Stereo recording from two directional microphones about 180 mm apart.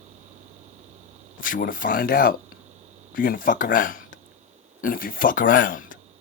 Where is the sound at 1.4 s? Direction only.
50° left (ahead or behind).